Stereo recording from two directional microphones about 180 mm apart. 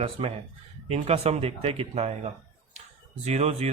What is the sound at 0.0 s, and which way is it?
Speech, 35° right (ahead or behind).